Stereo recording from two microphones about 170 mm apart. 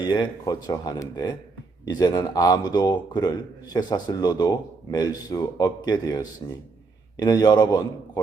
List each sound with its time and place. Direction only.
0.0 s a man's voice: 25° left (ahead or behind)